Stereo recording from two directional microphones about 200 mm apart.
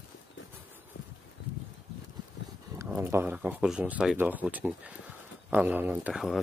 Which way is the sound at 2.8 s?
10° right (ahead or behind).